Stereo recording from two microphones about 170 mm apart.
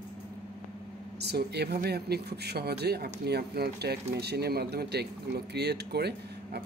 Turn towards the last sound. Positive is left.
turn(degrees=-70)  # may be behind; listen again after turning